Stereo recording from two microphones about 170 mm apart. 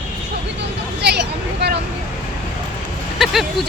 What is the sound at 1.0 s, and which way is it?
Vehicle, 75° right (ahead or behind).